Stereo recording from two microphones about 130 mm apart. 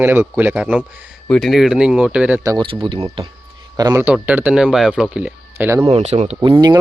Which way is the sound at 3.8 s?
30° right (ahead or behind).